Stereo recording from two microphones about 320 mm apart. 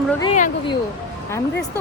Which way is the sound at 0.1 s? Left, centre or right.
Centre.